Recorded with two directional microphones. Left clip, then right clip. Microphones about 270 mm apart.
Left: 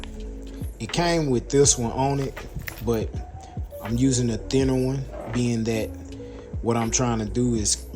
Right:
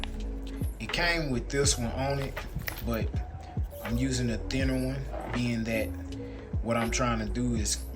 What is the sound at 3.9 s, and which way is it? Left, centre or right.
Speech, centre.